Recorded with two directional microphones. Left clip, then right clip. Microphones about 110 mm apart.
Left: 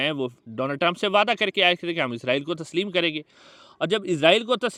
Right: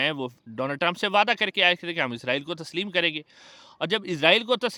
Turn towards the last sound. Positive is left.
turn(degrees=15)  # may be behind; listen again after turning